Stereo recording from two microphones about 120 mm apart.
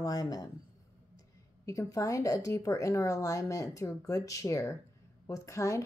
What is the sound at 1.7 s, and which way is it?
Speech, 25° left (ahead or behind).